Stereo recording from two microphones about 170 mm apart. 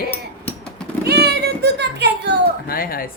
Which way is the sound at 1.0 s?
75° right (ahead or behind).